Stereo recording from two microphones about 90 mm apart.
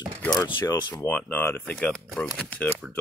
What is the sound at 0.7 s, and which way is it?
Speech, 50° left (ahead or behind).